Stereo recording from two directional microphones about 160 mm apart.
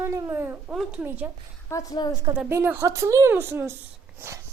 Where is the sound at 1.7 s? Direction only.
20° left (ahead or behind).